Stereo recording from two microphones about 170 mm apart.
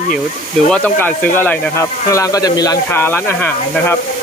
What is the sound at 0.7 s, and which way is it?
Speech, 10° left (ahead or behind).